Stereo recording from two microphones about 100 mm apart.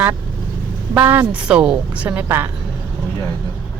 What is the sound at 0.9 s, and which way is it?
A woman's voice, 20° right (ahead or behind).